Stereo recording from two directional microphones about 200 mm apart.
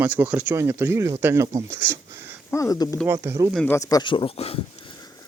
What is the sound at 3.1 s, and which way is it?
Speech, 15° right (ahead or behind).